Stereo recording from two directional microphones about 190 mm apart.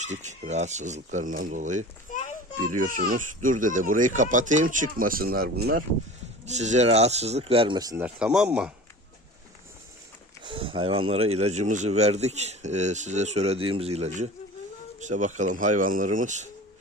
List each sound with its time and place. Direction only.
0.0 s speech: 40° right (ahead or behind)
6.4 s speech: 35° right (ahead or behind); by 8.0 s 20° right (ahead or behind)
8.0 s speech: 5° right (ahead or behind)
10.4 s speech: 30° right (ahead or behind)